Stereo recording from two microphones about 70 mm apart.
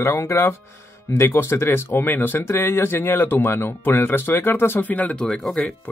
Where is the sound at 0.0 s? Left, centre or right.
Left.